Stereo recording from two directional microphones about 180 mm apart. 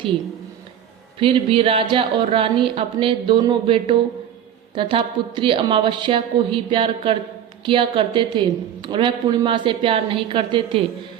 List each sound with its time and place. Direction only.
1.2 s a woman's voice: 30° right (ahead or behind)